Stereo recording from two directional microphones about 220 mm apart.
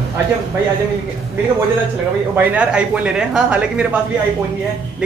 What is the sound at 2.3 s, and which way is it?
Speech, 5° right (ahead or behind).